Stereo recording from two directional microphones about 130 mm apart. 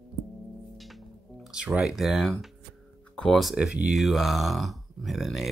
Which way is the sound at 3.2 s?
Centre (ahead or behind).